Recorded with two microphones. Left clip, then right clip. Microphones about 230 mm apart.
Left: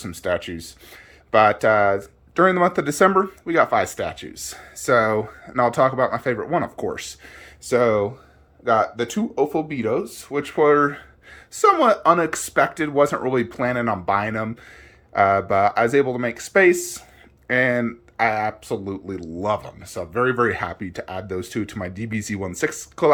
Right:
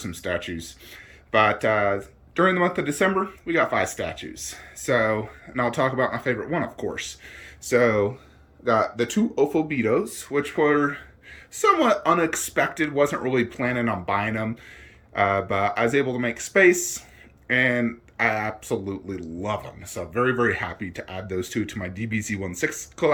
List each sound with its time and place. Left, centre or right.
0.0 s speech: centre